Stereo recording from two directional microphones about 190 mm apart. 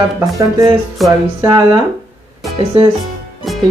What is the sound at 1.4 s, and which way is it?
Speech, 15° right (ahead or behind).